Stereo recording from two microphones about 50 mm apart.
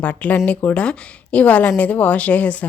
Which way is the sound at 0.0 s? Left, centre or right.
Left.